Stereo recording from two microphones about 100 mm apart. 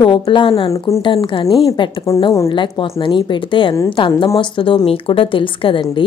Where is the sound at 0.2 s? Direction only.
65° left (ahead or behind).